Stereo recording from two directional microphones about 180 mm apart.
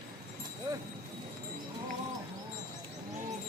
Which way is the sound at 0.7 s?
20° right (ahead or behind).